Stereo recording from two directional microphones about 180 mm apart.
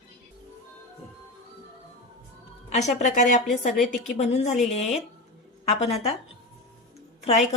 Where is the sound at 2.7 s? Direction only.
40° left (ahead or behind).